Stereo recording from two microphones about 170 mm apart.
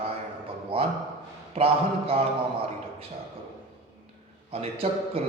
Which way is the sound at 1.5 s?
35° right (ahead or behind).